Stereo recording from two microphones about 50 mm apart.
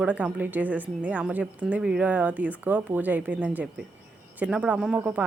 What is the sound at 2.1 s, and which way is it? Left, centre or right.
Speech, right.